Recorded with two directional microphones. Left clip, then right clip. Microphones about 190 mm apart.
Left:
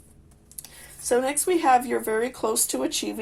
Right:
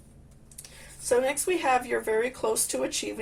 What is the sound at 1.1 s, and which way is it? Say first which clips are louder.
Speech: left 2 dB; 45° left (ahead or behind).